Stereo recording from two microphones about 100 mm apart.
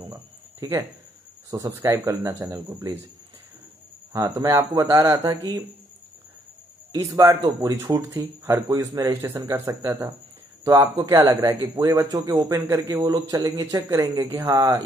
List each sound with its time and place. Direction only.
0.0 s a sound: 35° right (ahead or behind)
1.5 s speech: 30° right (ahead or behind)
4.1 s speech: 35° right (ahead or behind)
6.9 s speech: 35° right (ahead or behind)